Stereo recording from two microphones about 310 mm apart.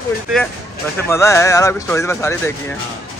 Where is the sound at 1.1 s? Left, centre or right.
Centre.